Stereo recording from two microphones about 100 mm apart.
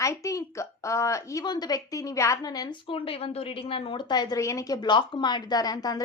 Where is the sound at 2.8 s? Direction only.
70° left (ahead or behind); by 4.4 s 40° left (ahead or behind).